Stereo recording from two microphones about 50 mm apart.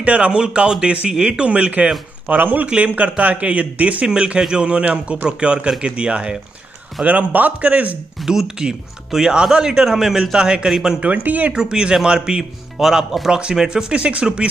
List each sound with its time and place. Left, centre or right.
0.0 s speech: right
2.2 s a man's voice: right
2.7 s speech: right
4.1 s speech: centre
7.1 s a man's voice: right
8.3 s speech: centre
11.2 s a man's voice: right
11.5 s speech: centre
12.7 s speech: centre
13.3 s speech: centre